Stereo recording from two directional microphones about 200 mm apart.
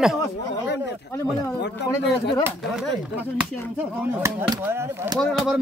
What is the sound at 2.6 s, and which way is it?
Speech, centre (ahead or behind).